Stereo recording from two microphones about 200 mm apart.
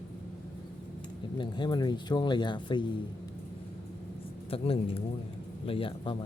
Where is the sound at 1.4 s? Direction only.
20° left (ahead or behind).